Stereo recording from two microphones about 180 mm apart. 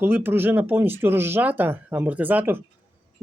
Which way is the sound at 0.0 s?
10° right (ahead or behind).